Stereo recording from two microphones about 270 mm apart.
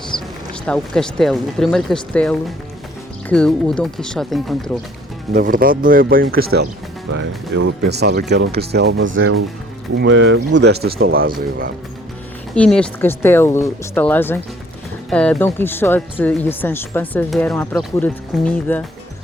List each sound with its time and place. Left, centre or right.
0.1 s music: centre
0.6 s speech: centre
5.3 s speech: right
7.1 s speech: right
12.5 s speech: centre